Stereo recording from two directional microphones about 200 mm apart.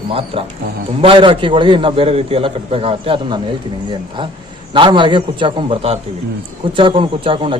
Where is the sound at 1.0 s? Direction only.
25° right (ahead or behind).